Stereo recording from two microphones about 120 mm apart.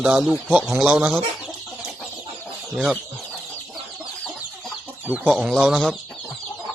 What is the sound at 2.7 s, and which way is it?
Speech, centre (ahead or behind).